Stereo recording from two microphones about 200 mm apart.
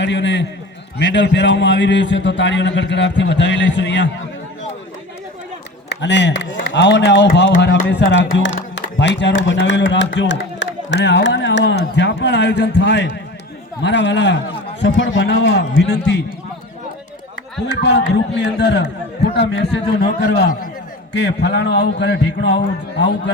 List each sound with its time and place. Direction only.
0.0 s a man's voice: 65° left (ahead or behind)
5.9 s a man's voice: 60° left (ahead or behind)
17.8 s a man's voice: 60° left (ahead or behind)